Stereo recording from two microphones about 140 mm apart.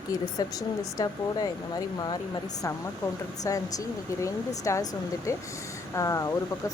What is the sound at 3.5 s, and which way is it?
Speech, 25° left (ahead or behind).